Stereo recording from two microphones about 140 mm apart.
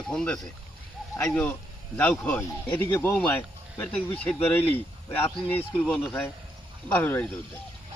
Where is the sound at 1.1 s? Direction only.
15° left (ahead or behind).